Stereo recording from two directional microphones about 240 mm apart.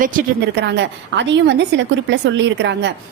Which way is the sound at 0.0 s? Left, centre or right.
Right.